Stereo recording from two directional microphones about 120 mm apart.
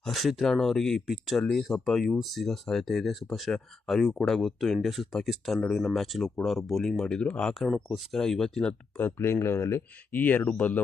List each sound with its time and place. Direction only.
0.0 s speech: centre (ahead or behind)
9.0 s speech: 20° left (ahead or behind)